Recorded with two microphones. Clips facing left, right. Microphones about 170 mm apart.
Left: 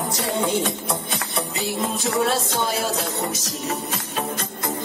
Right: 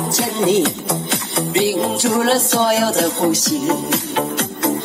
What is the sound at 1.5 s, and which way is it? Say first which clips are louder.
Music: right 11 dB; 80° right.